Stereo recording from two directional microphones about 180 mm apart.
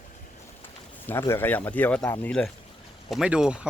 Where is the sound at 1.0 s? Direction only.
15° left (ahead or behind).